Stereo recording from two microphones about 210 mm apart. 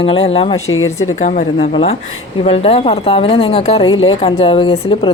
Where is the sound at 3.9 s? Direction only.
70° left (ahead or behind).